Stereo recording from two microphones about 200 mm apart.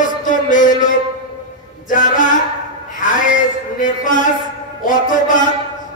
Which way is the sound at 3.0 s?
40° left (ahead or behind).